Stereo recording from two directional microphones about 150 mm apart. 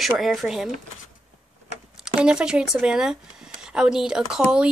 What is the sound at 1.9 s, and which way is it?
Speech, 5° right (ahead or behind).